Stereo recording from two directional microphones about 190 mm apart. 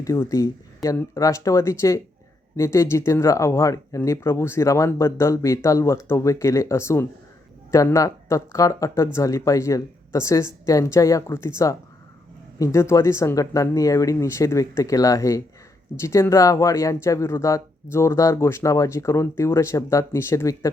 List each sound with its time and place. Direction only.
0.0 s speech: 15° left (ahead or behind)